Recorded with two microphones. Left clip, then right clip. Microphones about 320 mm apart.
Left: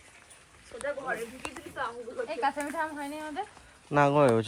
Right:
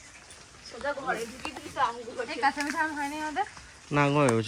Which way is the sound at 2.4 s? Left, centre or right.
Centre.